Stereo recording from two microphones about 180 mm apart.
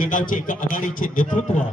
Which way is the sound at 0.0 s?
50° left (ahead or behind).